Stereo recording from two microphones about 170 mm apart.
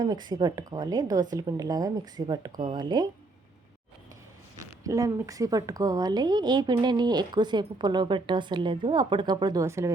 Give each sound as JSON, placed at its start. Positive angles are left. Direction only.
{"t": 0.0, "sound": "speech", "side_deg": -25}
{"t": 4.6, "sound": "speech", "side_deg": -20}